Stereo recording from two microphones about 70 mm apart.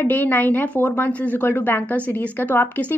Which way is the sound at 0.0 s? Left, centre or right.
Left.